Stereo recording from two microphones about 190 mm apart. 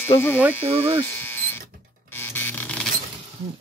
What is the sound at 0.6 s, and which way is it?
Speech, 30° right (ahead or behind).